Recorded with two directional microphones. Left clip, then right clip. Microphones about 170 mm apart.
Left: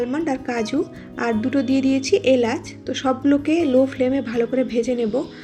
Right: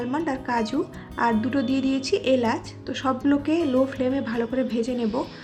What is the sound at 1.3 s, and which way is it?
Speech, 45° right (ahead or behind).